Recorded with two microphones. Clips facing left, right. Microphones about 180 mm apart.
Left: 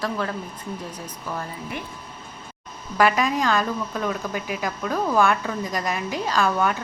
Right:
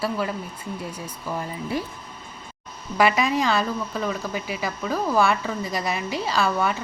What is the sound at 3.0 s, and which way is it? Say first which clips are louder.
A woman's voice: even; 5° right (ahead or behind).